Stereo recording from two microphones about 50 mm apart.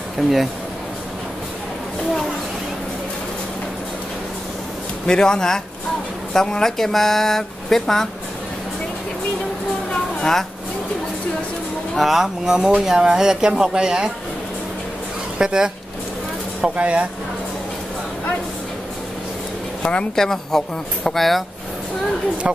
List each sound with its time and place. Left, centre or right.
0.2 s speech: centre
5.0 s speech: centre
12.0 s speech: centre
15.3 s speech: centre
19.8 s speech: left
20.2 s speech: centre